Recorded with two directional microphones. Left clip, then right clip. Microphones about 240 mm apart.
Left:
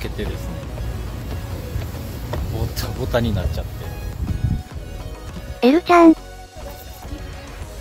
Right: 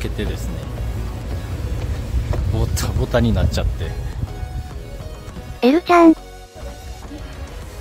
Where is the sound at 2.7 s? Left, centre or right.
Centre.